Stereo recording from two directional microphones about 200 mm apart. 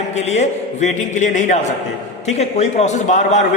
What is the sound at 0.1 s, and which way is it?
A man's voice, 35° left (ahead or behind).